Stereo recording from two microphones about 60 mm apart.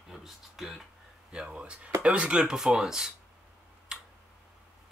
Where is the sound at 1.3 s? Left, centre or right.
Centre.